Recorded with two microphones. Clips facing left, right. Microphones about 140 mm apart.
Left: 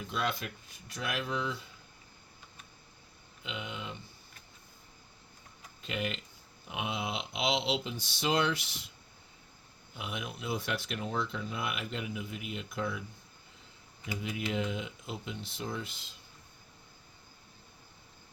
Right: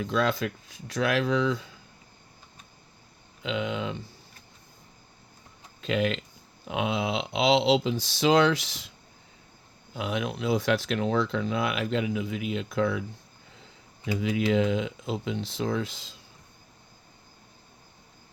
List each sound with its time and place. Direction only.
0.0 s speech: 90° right
3.4 s speech: 90° right
5.8 s speech: 90° right
9.9 s speech: 90° right
14.2 s speech: 90° right